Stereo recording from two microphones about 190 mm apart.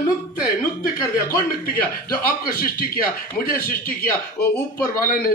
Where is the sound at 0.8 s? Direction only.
50° left (ahead or behind).